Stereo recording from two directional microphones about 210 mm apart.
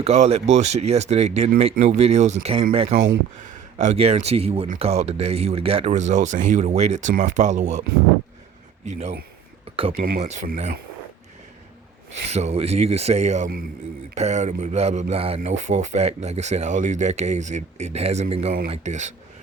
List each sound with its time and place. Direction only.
0.0 s speech: 30° right (ahead or behind)
8.9 s speech: 30° right (ahead or behind)
12.2 s speech: 30° right (ahead or behind)